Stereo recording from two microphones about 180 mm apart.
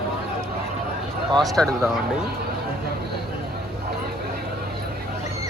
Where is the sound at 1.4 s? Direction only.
Centre (ahead or behind).